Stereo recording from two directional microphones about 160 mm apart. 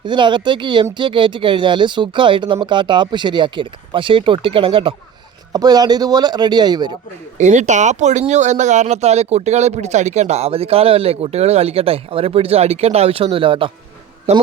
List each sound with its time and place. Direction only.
0.0 s speech: 30° right (ahead or behind)
7.3 s speech: 50° right (ahead or behind); by 13.7 s 35° right (ahead or behind)